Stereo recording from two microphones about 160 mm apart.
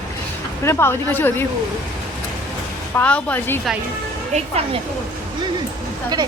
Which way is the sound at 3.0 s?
10° left (ahead or behind).